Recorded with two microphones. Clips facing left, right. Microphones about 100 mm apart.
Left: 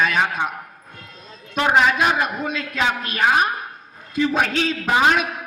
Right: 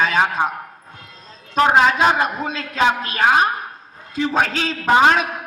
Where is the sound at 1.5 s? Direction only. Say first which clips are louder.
Right 3 dB; 35° right (ahead or behind).